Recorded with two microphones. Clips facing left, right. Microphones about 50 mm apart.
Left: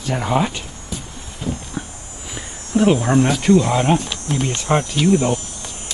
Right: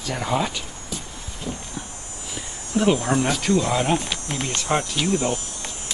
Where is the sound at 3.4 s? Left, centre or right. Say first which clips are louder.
Left 6 dB; left.